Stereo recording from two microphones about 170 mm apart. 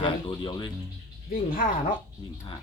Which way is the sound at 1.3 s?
55° left (ahead or behind).